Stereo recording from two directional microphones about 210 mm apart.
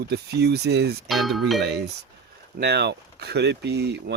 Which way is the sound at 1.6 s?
50° right (ahead or behind).